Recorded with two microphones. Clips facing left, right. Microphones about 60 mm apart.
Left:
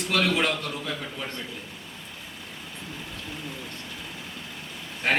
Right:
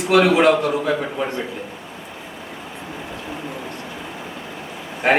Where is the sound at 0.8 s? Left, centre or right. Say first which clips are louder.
Right 12 dB; right.